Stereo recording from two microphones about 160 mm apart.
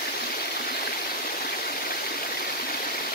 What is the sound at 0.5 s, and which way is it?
Stream, 70° left (ahead or behind).